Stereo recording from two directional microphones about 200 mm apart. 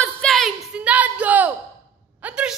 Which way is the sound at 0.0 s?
5° left (ahead or behind).